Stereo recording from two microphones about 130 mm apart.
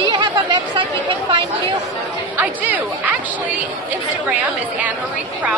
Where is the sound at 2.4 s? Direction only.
15° right (ahead or behind).